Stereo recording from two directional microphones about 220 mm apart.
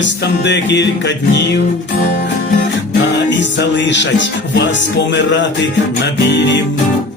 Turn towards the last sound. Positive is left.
turn(degrees=55)  # may be behind; listen again after turning